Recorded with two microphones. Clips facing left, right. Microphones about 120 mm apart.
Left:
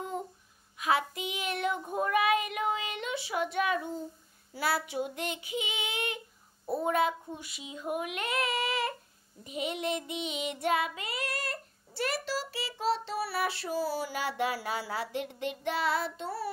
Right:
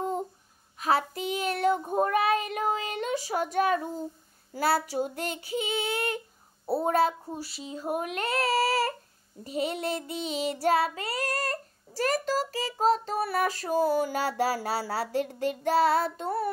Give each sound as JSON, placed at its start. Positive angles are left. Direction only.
{"t": 0.7, "sound": "child singing", "side_deg": -35}